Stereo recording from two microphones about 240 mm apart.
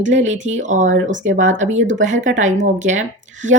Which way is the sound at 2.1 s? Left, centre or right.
Right.